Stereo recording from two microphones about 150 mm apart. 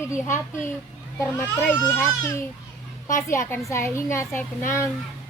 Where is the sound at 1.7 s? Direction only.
15° left (ahead or behind).